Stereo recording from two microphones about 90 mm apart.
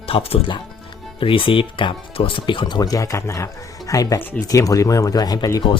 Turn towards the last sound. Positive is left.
turn(degrees=45)  # may be behind; listen again after turning